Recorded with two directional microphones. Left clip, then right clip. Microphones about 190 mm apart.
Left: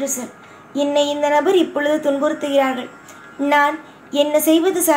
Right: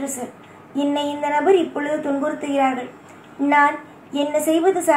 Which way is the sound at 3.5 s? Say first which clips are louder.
Even; 50° left (ahead or behind).